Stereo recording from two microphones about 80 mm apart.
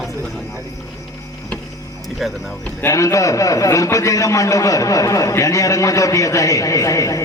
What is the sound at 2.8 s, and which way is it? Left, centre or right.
A man's voice, left.